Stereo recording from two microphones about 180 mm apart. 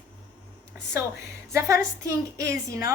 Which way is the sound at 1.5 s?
15° right (ahead or behind).